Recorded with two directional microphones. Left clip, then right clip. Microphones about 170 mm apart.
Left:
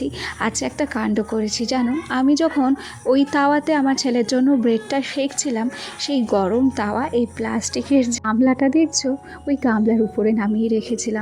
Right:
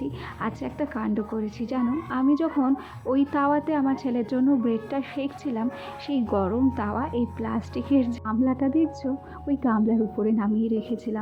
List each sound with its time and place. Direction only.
0.0 s a woman's voice: 35° left (ahead or behind); by 8.2 s 20° left (ahead or behind)
8.2 s a woman's voice: 35° left (ahead or behind)